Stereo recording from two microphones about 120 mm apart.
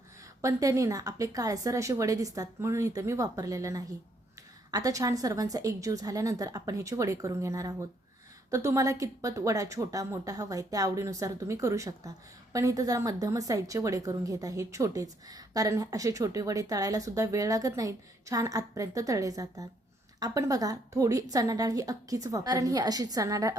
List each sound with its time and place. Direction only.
0.4 s a woman's voice: 25° right (ahead or behind)